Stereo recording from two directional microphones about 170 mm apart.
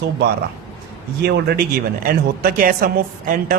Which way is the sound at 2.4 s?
55° right (ahead or behind).